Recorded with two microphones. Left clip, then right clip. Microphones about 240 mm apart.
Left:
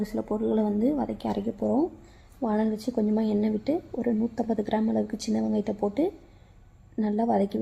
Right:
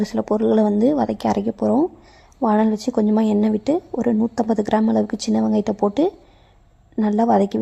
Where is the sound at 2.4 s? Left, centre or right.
Right.